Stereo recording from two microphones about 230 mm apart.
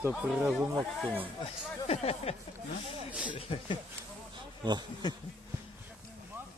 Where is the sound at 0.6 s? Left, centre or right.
Centre.